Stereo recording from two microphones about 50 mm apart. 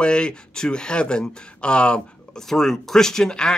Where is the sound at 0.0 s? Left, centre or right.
Centre.